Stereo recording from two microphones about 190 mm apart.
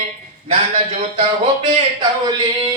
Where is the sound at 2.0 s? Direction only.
20° right (ahead or behind).